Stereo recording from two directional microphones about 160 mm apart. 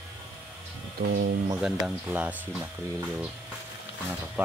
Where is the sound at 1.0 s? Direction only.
90° right.